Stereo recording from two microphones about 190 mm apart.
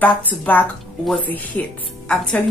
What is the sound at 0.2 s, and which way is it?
A woman's voice, 10° left (ahead or behind).